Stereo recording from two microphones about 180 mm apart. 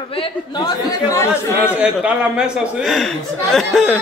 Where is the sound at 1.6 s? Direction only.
10° right (ahead or behind).